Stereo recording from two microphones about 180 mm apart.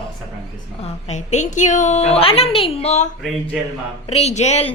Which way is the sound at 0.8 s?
40° left (ahead or behind).